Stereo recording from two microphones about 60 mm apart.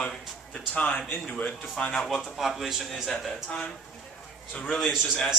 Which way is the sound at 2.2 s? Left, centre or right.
Centre.